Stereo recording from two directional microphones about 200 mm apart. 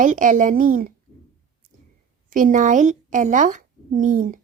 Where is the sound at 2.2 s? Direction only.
40° right (ahead or behind).